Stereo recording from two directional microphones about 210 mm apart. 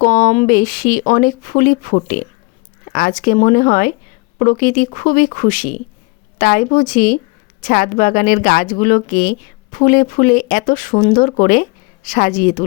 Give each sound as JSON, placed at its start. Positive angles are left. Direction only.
{"t": 0.0, "sound": "speech", "side_deg": 40}